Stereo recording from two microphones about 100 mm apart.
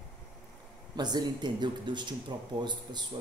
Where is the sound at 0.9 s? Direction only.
45° right (ahead or behind).